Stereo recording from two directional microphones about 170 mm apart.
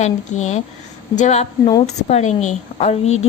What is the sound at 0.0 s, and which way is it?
A woman's voice, 40° left (ahead or behind).